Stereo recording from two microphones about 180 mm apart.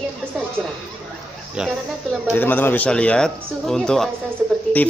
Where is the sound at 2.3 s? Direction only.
10° left (ahead or behind).